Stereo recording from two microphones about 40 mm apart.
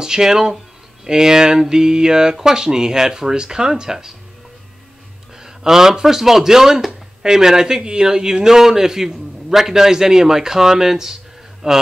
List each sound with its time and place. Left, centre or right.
0.0 s a man's voice: centre
5.4 s a man's voice: centre